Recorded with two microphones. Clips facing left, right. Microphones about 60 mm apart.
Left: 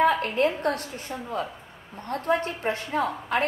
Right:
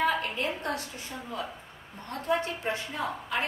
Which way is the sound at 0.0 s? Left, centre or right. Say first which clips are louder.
Left 6 dB; left.